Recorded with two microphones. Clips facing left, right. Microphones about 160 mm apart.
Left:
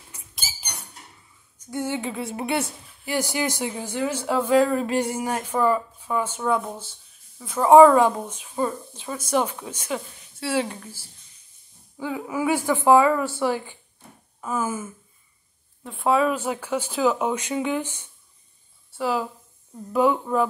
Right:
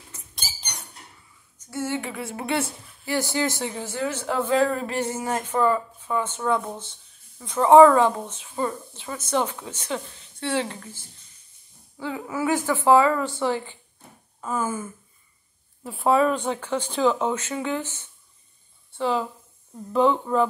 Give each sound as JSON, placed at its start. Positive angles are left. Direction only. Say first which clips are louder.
{"t": 0.1, "sound": "rodents", "louder": "left 1 dB", "side_deg": 5}
{"t": 1.6, "sound": "a woman's voice", "louder": "left 1 dB", "side_deg": 15}
{"t": 15.8, "sound": "speech", "louder": "right 1 dB", "side_deg": 0}